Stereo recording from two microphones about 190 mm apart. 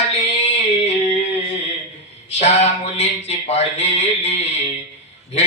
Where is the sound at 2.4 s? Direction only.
35° left (ahead or behind).